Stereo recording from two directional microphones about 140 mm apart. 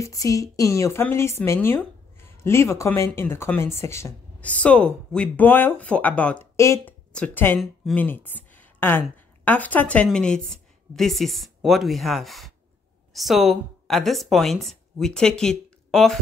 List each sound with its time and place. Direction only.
0.0 s a woman's voice: 25° left (ahead or behind)
6.5 s a woman's voice: 20° left (ahead or behind); by 16.2 s centre (ahead or behind)